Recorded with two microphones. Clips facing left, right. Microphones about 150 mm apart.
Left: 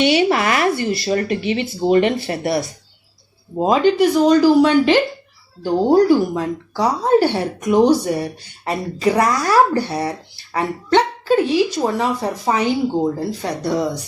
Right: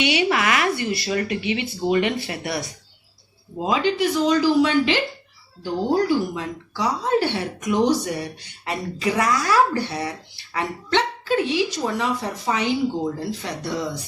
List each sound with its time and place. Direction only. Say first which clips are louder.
0.0 s speech: left 5 dB; 35° left (ahead or behind)